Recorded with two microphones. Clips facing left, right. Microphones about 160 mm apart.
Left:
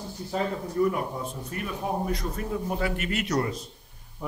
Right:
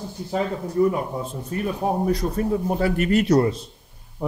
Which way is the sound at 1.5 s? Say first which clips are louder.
Right 7 dB; 30° right (ahead or behind).